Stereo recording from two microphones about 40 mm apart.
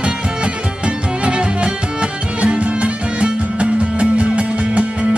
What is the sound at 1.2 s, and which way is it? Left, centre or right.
Music, right.